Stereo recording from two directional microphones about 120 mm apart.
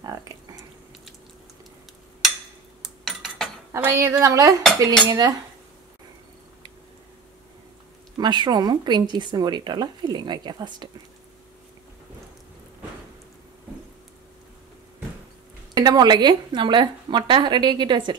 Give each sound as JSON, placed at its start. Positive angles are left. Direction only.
{"t": 0.0, "sound": "a sound", "side_deg": -30}
{"t": 2.8, "sound": "cutlery", "side_deg": 0}
{"t": 3.7, "sound": "a woman's voice", "side_deg": -25}
{"t": 8.2, "sound": "a woman's voice", "side_deg": -35}
{"t": 15.7, "sound": "a woman's voice", "side_deg": -30}